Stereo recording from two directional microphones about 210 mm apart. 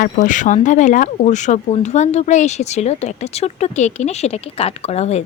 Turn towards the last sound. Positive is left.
turn(degrees=30)  # may be behind; listen again after turning